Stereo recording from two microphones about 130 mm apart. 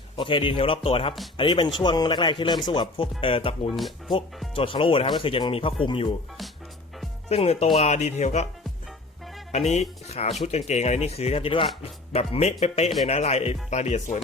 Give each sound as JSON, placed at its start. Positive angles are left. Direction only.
{"t": 0.2, "sound": "a man's voice", "side_deg": 40}
{"t": 7.3, "sound": "speech", "side_deg": 50}
{"t": 9.5, "sound": "speech", "side_deg": 60}